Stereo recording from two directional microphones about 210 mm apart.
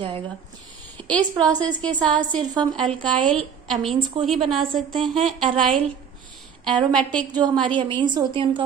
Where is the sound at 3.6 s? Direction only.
Centre (ahead or behind).